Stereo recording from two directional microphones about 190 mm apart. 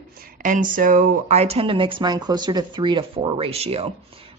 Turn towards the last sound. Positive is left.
turn(degrees=-30)  # may be behind; listen again after turning